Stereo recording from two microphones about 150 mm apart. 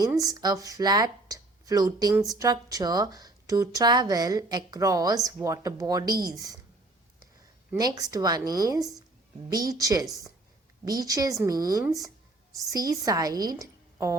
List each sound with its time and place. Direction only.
0.0 s speech: 25° right (ahead or behind)
7.8 s speech: 25° right (ahead or behind)